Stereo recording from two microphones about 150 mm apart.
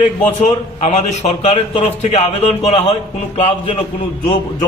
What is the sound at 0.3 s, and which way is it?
A man's voice, 50° left (ahead or behind).